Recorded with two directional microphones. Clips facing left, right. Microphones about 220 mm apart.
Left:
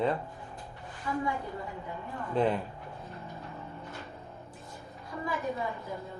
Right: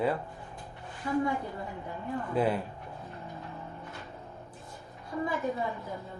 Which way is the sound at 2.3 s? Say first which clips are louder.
Left 1 dB; 10° right (ahead or behind).